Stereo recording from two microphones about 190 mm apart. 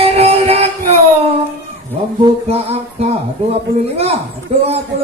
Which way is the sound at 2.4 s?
30° right (ahead or behind).